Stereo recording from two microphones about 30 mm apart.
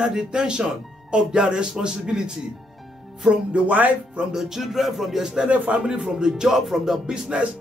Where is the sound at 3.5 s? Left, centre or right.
Right.